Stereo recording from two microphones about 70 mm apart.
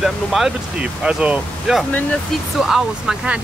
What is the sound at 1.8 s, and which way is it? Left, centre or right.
Speech, centre.